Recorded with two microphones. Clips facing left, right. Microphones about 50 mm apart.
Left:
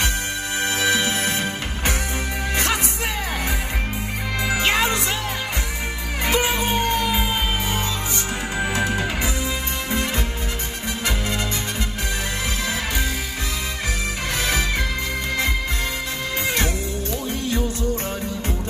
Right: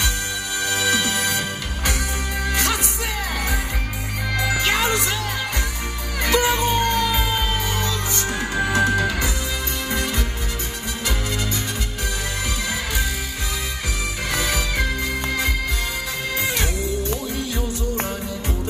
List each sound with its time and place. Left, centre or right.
0.6 s music: left
4.4 s music: left
6.2 s music: left
16.3 s music: left